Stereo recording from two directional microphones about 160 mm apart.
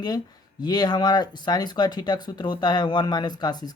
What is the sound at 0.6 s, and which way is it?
Speech, 25° left (ahead or behind).